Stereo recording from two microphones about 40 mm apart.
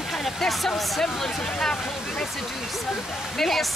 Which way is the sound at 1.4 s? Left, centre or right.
Centre.